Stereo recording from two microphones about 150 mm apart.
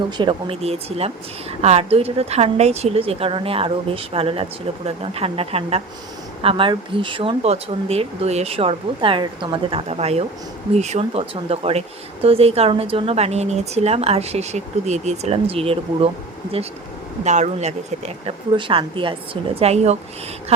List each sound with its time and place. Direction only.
0.2 s speech: 35° right (ahead or behind)
17.2 s speech: 50° right (ahead or behind)